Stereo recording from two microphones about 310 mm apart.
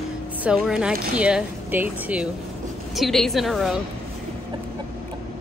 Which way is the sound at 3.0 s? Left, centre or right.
Centre.